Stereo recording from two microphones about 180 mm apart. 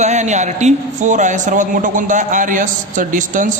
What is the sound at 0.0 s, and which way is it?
A man's voice, 40° right (ahead or behind).